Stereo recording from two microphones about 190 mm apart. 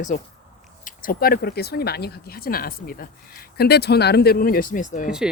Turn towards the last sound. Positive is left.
turn(degrees=45)  # may be behind; listen again after turning